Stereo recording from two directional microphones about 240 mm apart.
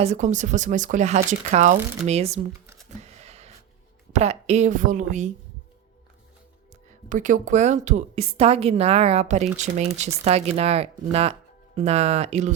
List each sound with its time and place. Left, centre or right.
0.0 s a woman's voice: right
3.0 s a sound: right
4.1 s a woman's voice: right
7.1 s a woman's voice: right